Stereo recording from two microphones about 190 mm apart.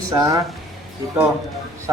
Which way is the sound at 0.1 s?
15° right (ahead or behind).